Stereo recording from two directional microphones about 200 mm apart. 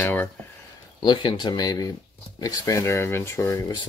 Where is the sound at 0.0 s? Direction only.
10° left (ahead or behind).